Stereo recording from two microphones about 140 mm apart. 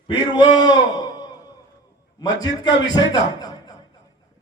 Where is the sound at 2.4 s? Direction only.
30° left (ahead or behind).